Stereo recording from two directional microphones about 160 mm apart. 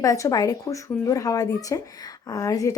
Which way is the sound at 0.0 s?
20° left (ahead or behind).